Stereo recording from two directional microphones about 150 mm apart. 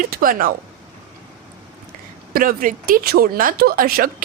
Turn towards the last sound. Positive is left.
turn(degrees=-80)